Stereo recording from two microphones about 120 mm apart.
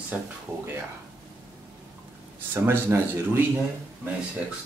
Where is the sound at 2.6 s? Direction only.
20° right (ahead or behind).